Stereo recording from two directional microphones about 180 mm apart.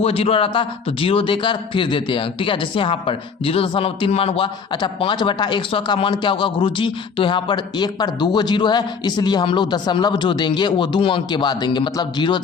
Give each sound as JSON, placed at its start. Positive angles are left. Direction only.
{"t": 0.0, "sound": "a man's voice", "side_deg": 35}